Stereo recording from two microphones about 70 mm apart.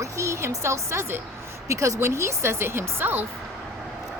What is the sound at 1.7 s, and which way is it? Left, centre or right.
Speech, right.